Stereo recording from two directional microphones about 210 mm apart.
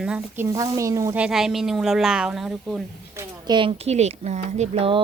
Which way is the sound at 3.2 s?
20° right (ahead or behind).